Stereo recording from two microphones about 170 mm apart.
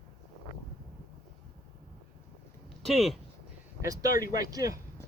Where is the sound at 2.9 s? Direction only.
Centre (ahead or behind).